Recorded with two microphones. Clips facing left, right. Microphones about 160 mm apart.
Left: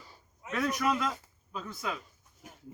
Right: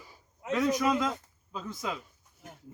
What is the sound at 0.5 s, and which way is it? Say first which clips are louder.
Speech: right 3 dB; 20° right (ahead or behind).